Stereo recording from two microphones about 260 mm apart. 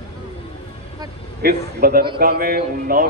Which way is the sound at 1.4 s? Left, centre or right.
Right.